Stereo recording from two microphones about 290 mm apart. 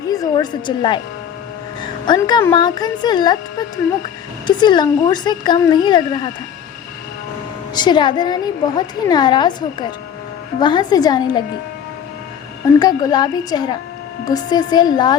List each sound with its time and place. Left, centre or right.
0.1 s speech: centre
2.0 s speech: centre
7.8 s speech: centre
12.8 s speech: centre